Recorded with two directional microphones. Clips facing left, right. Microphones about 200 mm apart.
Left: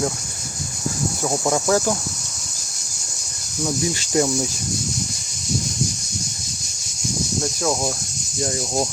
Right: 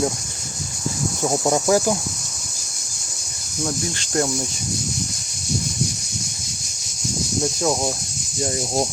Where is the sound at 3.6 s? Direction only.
5° left (ahead or behind).